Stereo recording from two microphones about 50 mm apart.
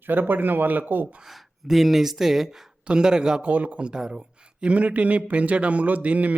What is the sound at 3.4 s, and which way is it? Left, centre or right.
Speech, right.